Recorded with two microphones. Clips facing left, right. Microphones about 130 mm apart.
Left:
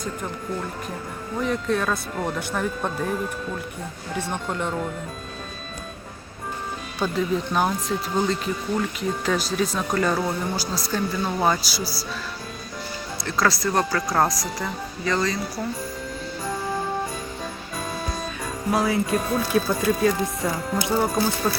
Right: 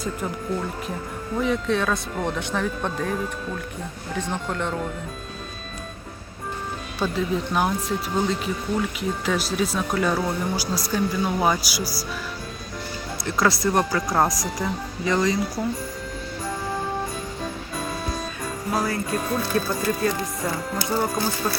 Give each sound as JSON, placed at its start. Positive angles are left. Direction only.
{"t": 1.4, "sound": "speech", "side_deg": 0}
{"t": 7.0, "sound": "speech", "side_deg": 0}
{"t": 13.2, "sound": "speech", "side_deg": -20}
{"t": 18.7, "sound": "speech", "side_deg": 0}